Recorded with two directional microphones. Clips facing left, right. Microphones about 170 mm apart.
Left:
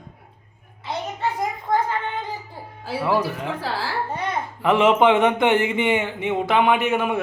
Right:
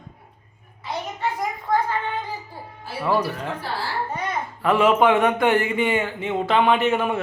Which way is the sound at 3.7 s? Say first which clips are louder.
Left 3 dB; 90° left.